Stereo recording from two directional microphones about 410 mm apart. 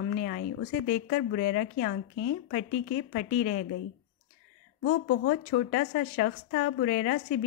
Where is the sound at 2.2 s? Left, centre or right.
Left.